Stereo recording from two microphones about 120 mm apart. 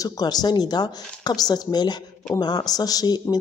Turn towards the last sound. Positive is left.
turn(degrees=35)  # may be behind; listen again after turning